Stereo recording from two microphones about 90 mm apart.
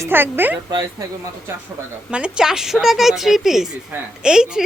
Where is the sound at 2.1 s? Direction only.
10° right (ahead or behind).